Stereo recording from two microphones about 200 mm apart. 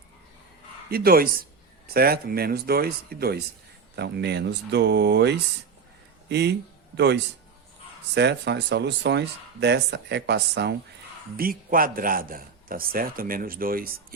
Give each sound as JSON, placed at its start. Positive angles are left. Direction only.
{"t": 0.9, "sound": "a man's voice", "side_deg": -50}
{"t": 11.3, "sound": "a man's voice", "side_deg": -45}